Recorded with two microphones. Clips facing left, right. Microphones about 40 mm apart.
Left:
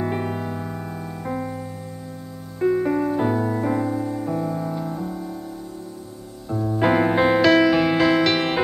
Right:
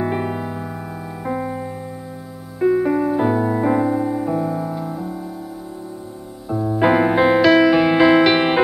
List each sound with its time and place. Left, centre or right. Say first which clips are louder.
0.0 s piano: right 3 dB; centre
1.2 s music: right 5 dB; centre
6.5 s music: right 3 dB; centre